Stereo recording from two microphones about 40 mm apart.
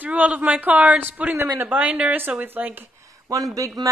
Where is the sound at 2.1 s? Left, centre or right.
Right.